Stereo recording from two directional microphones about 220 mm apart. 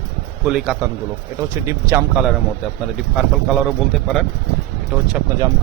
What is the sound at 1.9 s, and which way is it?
Speech, 5° right (ahead or behind).